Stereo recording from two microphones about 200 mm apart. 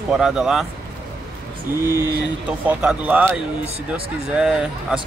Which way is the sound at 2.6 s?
5° right (ahead or behind).